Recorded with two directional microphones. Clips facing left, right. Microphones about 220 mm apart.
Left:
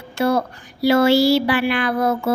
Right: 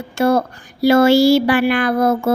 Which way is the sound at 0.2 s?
45° right (ahead or behind).